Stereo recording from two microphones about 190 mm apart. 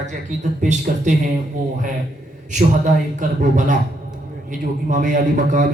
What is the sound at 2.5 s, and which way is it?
A man's voice, 40° right (ahead or behind).